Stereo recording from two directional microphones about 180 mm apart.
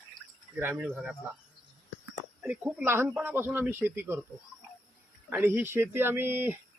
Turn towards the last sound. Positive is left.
turn(degrees=-10)  # may be behind; listen again after turning